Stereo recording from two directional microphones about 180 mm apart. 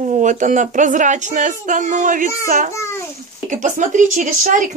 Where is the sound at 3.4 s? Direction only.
45° right (ahead or behind).